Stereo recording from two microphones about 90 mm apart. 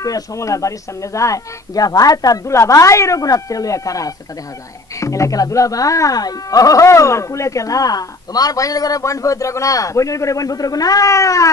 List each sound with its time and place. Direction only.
0.0 s speech: 40° left (ahead or behind)